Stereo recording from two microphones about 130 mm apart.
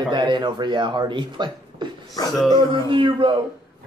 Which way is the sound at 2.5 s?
40° right (ahead or behind).